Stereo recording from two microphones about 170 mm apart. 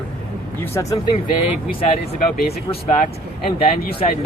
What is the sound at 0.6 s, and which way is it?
Speech, 15° left (ahead or behind).